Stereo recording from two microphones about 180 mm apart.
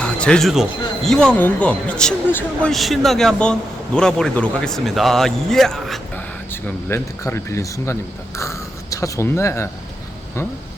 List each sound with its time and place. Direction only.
0.0 s speech: 5° left (ahead or behind)
6.5 s speech: 10° left (ahead or behind)